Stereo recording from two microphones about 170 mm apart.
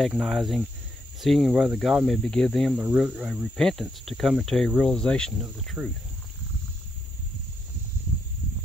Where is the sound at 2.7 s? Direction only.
10° right (ahead or behind).